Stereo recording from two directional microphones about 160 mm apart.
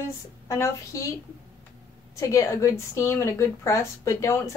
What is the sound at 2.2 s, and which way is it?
A woman's voice, 20° left (ahead or behind).